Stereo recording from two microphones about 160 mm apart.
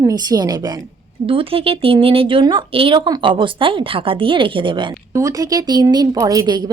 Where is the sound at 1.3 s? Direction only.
35° right (ahead or behind).